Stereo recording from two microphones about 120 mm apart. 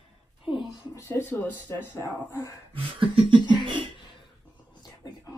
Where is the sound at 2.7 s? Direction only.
45° right (ahead or behind).